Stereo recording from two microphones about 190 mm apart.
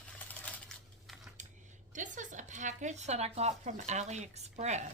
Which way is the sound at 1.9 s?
40° right (ahead or behind).